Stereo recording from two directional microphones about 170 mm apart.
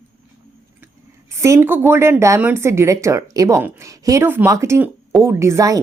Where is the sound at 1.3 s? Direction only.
15° right (ahead or behind).